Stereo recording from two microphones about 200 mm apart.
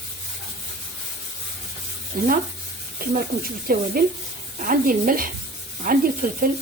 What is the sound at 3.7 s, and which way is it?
Speech, 45° right (ahead or behind).